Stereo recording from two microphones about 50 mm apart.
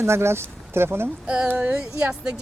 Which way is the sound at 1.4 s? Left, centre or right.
Right.